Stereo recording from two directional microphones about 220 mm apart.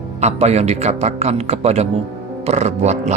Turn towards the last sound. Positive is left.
turn(degrees=-30)  # may be behind; listen again after turning